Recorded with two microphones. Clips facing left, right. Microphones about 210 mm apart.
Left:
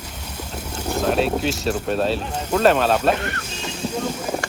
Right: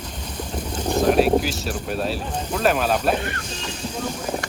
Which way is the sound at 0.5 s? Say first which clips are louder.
Right 3 dB; 10° left (ahead or behind).